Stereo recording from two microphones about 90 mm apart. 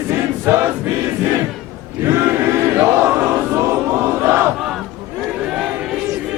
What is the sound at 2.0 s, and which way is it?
Chant, 30° right (ahead or behind).